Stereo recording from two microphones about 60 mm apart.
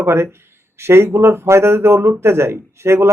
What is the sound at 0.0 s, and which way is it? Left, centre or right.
Speech, right.